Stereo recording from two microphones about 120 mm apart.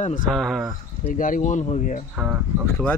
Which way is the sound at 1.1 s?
90° left.